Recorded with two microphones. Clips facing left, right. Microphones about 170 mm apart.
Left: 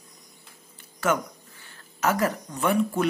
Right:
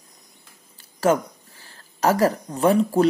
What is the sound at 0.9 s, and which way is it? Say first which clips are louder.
Speech: right 6 dB; 35° right (ahead or behind).